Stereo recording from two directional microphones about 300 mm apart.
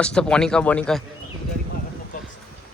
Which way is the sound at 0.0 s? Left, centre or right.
Centre.